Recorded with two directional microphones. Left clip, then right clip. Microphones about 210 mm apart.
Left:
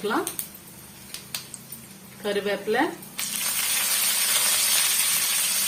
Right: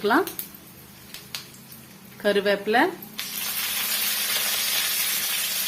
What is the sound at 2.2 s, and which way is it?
Speech, 50° right (ahead or behind).